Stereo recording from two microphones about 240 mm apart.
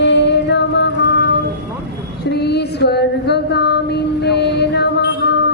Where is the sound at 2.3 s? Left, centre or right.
Left.